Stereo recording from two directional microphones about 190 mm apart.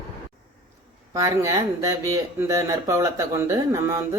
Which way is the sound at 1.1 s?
15° right (ahead or behind).